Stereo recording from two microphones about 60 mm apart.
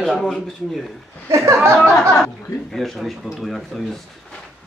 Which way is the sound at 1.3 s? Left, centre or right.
Right.